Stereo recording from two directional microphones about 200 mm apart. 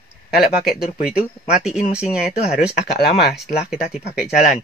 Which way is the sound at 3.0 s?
50° left (ahead or behind).